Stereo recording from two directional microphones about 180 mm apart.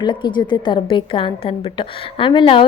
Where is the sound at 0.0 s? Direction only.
25° left (ahead or behind).